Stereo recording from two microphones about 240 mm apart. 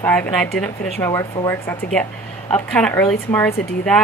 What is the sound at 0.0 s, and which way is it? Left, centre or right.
A woman's voice, centre.